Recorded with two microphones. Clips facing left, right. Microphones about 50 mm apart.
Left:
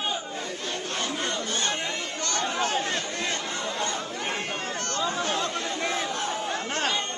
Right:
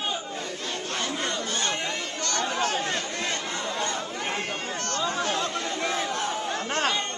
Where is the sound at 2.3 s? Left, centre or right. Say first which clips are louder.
Even; left.